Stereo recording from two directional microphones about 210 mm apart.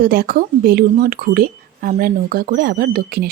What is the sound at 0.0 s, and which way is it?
Speech, 45° right (ahead or behind).